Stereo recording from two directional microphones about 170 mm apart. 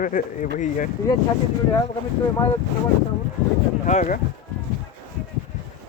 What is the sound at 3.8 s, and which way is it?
Speech, 45° left (ahead or behind).